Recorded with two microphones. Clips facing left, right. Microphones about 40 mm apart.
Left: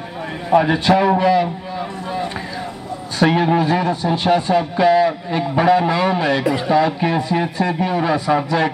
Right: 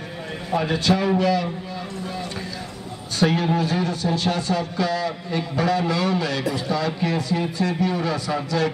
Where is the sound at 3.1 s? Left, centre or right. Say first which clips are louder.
Left 5 dB; left.